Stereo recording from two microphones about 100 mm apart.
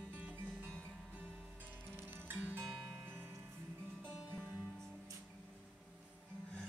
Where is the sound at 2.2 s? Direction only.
20° right (ahead or behind).